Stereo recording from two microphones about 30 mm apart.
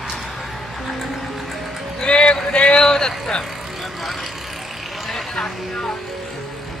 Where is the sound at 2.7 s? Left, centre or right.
Left.